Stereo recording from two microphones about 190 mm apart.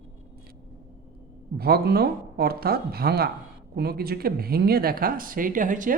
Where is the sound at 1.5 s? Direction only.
55° right (ahead or behind).